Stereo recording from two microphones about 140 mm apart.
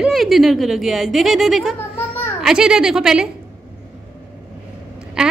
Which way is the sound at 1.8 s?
15° left (ahead or behind).